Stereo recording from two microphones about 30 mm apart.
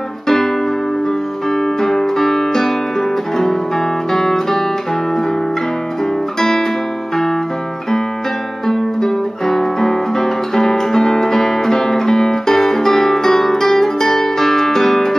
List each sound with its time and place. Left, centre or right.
1.8 s music: centre
4.1 s music: centre
8.6 s guitar: centre